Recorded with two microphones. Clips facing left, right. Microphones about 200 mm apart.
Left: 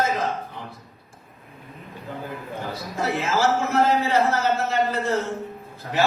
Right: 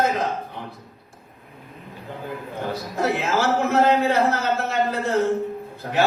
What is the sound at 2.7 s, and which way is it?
A man's voice, 60° right (ahead or behind).